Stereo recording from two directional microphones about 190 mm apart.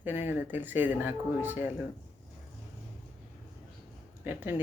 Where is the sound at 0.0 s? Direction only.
10° right (ahead or behind).